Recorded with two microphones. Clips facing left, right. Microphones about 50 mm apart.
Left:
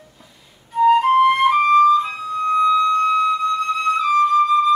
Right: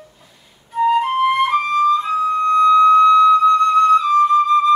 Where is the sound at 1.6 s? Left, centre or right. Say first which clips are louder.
Left 3 dB; centre.